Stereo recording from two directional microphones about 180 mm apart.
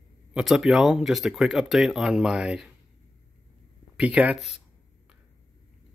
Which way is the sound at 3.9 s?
5° right (ahead or behind).